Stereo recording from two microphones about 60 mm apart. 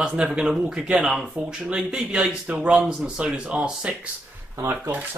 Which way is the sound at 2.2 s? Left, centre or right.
Right.